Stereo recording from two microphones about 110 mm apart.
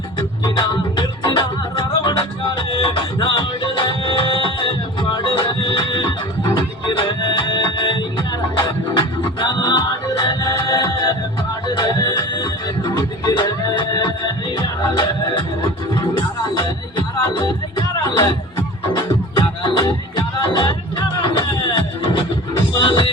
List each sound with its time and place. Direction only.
0.2 s music: 45° left (ahead or behind)
17.3 s music: 40° left (ahead or behind)
19.6 s music: 45° left (ahead or behind)